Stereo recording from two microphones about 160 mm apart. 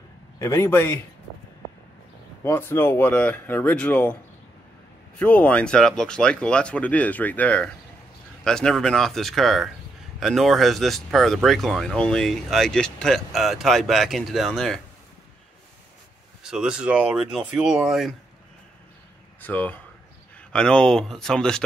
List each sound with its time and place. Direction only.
0.4 s speech: 15° left (ahead or behind)
2.4 s speech: 15° left (ahead or behind)
5.2 s speech: 10° left (ahead or behind)
16.4 s speech: 5° right (ahead or behind)
19.4 s speech: 10° left (ahead or behind)